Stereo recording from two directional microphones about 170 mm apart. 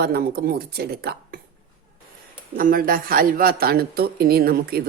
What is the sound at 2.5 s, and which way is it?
Speech, 55° right (ahead or behind).